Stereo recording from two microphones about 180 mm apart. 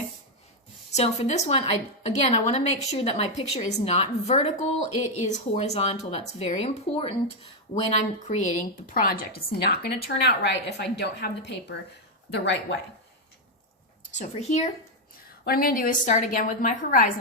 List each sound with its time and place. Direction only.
0.9 s speech: 35° left (ahead or behind)
8.9 s a woman's voice: 55° left (ahead or behind)
12.3 s speech: 80° left
14.1 s speech: 40° left (ahead or behind)
15.4 s a woman's voice: 55° left (ahead or behind)